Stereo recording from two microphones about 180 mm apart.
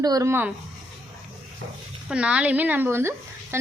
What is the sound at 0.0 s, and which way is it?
Speech, 20° right (ahead or behind).